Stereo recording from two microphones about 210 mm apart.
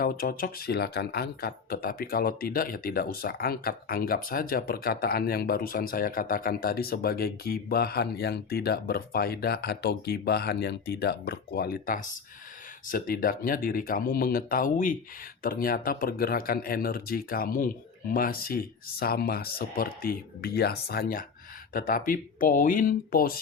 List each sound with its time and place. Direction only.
0.0 s speech: 45° left (ahead or behind)